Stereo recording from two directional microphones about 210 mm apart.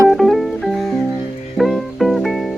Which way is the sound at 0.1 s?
Centre (ahead or behind).